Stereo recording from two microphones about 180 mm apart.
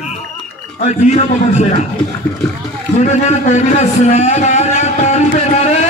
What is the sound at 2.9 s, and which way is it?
A man's voice, 40° left (ahead or behind).